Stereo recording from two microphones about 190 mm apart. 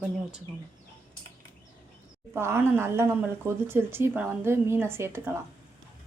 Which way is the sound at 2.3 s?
15° right (ahead or behind).